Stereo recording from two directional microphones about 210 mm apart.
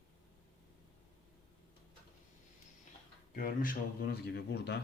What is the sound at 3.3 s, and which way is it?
Speech, 40° left (ahead or behind).